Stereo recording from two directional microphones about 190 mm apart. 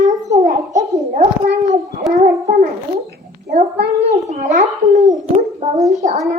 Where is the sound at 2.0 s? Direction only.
Centre (ahead or behind).